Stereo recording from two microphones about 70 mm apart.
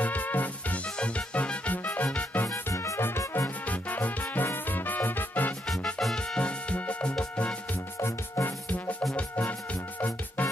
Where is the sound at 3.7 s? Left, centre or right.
Left.